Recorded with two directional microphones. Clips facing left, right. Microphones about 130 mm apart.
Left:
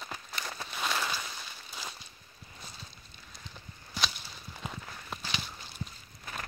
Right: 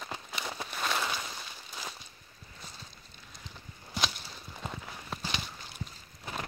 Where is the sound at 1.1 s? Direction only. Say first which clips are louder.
Right 1 dB; 15° right (ahead or behind).